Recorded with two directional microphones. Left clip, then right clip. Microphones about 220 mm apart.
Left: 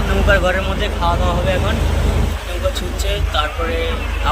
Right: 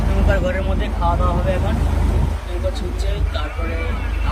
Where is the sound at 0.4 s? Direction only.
10° right (ahead or behind).